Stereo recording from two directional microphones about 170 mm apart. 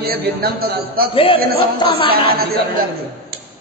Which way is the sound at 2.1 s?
60° right (ahead or behind).